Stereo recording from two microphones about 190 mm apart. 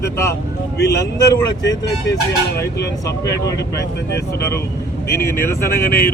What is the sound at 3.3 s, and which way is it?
Speech, 60° left (ahead or behind).